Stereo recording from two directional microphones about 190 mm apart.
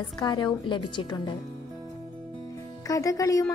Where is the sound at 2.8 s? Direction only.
15° left (ahead or behind).